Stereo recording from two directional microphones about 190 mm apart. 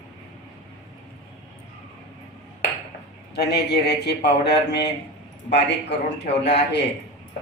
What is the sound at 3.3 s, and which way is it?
Speech, 60° left (ahead or behind).